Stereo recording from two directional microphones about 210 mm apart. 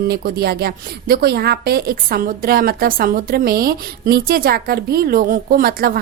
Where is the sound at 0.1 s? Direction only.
45° right (ahead or behind).